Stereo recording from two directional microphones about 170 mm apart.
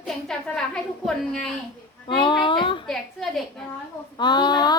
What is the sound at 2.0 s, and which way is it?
Speech, 30° left (ahead or behind).